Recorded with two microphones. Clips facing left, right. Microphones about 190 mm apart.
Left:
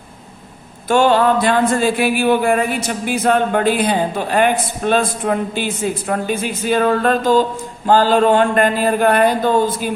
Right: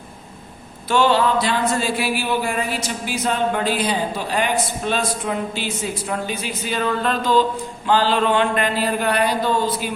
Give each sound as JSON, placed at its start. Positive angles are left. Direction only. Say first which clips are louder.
{"t": 0.9, "sound": "speech", "louder": "left 4 dB", "side_deg": 50}